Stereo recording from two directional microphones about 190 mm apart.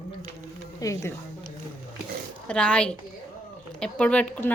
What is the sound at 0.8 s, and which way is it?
Speech, 15° left (ahead or behind).